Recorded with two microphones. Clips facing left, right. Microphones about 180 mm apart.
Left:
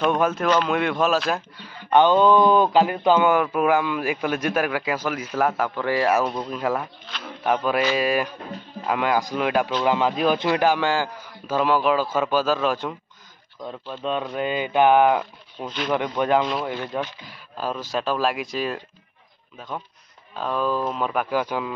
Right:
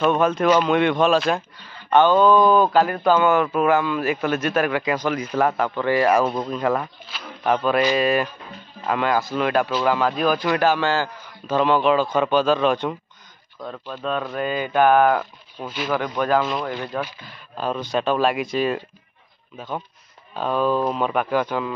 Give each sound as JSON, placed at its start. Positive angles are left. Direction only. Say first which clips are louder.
{"t": 0.2, "sound": "a man's voice", "louder": "right 3 dB", "side_deg": 5}
{"t": 7.1, "sound": "speech", "louder": "left 1 dB", "side_deg": -5}
{"t": 7.4, "sound": "a man's voice", "louder": "right 2 dB", "side_deg": 10}
{"t": 13.6, "sound": "a man's voice", "louder": "right 1 dB", "side_deg": 15}
{"t": 15.6, "sound": "speech", "louder": "even", "side_deg": -5}
{"t": 15.9, "sound": "speech", "louder": "even", "side_deg": 25}
{"t": 17.2, "sound": "speech", "louder": "right 2 dB", "side_deg": 5}
{"t": 20.3, "sound": "speech", "louder": "right 3 dB", "side_deg": 0}